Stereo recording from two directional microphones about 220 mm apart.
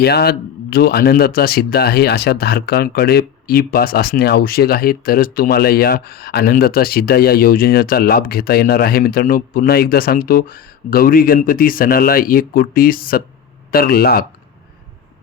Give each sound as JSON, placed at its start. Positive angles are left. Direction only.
{"t": 0.0, "sound": "speech", "side_deg": 45}